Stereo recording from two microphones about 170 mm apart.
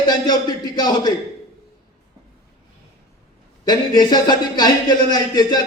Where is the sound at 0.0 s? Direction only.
25° left (ahead or behind).